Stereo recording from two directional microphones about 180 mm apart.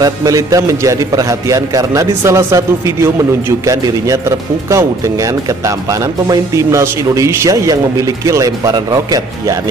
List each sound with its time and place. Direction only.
0.0 s speech: 20° right (ahead or behind)